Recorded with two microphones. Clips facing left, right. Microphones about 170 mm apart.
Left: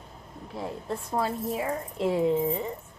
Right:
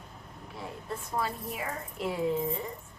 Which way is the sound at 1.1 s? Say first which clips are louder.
Left 6 dB; 25° left (ahead or behind).